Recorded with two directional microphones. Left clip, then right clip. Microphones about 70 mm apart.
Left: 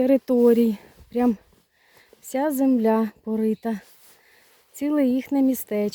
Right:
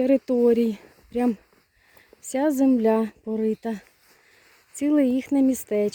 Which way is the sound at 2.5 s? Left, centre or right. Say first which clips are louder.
Even; right.